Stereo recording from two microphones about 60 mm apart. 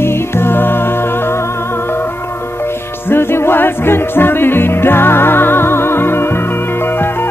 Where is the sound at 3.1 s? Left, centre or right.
Left.